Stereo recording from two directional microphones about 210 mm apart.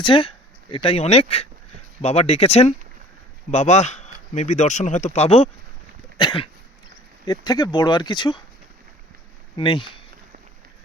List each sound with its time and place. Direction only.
0.0 s speech: 25° left (ahead or behind)
9.6 s speech: 25° left (ahead or behind)